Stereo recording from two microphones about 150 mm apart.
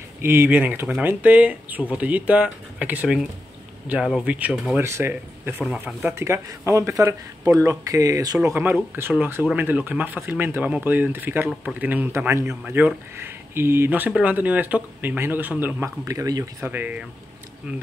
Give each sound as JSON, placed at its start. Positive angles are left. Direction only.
{"t": 0.2, "sound": "speech", "side_deg": -15}
{"t": 16.6, "sound": "speech", "side_deg": -10}